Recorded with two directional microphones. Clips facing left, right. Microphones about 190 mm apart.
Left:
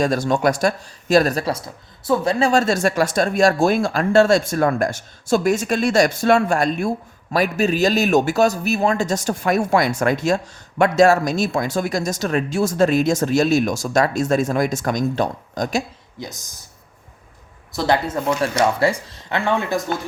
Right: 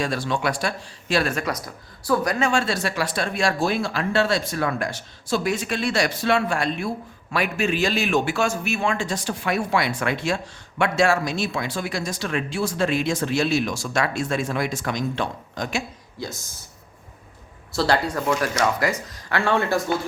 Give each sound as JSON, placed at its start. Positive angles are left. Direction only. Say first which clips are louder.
{"t": 0.0, "sound": "speech", "louder": "left 6 dB", "side_deg": 45}
{"t": 2.5, "sound": "speech", "louder": "left 6 dB", "side_deg": 45}
{"t": 16.2, "sound": "speech", "louder": "right 1 dB", "side_deg": 20}
{"t": 17.7, "sound": "speech", "louder": "left 2 dB", "side_deg": 20}